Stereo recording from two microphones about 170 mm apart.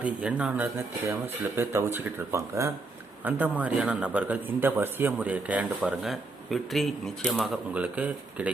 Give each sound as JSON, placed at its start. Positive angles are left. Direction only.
{"t": 0.0, "sound": "a man's voice", "side_deg": -5}